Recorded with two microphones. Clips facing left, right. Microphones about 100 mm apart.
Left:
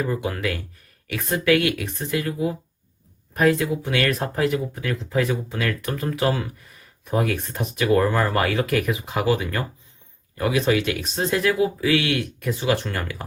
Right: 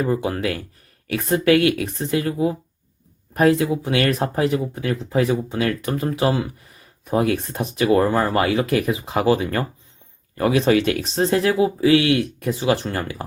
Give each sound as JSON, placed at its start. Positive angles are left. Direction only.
{"t": 0.0, "sound": "speech", "side_deg": -35}
{"t": 3.6, "sound": "speech", "side_deg": -25}